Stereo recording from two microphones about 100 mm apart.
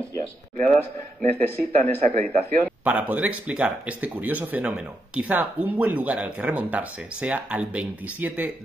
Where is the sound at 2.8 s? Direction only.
15° right (ahead or behind).